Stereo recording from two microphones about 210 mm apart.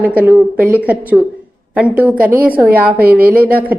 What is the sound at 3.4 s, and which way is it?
Speech, 45° right (ahead or behind).